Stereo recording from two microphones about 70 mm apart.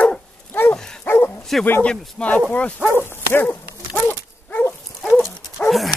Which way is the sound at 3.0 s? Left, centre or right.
Left.